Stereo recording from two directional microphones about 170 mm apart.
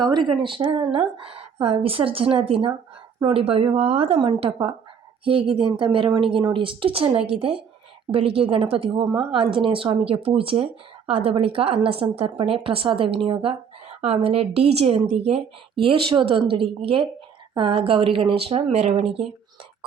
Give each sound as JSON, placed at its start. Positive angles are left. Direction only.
{"t": 0.0, "sound": "a woman's voice", "side_deg": -25}